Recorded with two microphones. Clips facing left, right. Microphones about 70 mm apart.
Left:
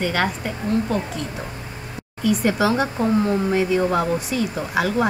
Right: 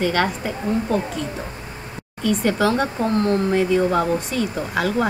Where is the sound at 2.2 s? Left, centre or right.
Centre.